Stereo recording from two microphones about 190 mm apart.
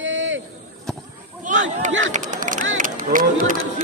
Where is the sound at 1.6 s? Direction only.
40° right (ahead or behind).